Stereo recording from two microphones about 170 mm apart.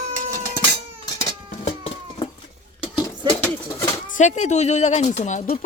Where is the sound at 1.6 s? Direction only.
40° left (ahead or behind).